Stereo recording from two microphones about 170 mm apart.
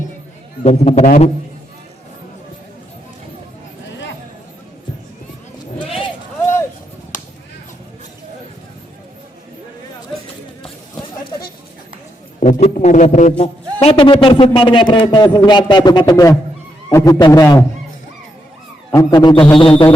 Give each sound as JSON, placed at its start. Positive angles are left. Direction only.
{"t": 0.6, "sound": "a man's voice", "side_deg": 35}
{"t": 12.4, "sound": "a man's voice", "side_deg": 40}
{"t": 18.9, "sound": "a man's voice", "side_deg": 20}